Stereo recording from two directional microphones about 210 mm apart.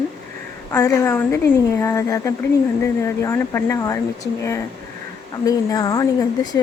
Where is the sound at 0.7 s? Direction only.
10° left (ahead or behind).